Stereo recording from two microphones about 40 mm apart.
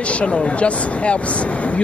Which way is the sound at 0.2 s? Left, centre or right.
Left.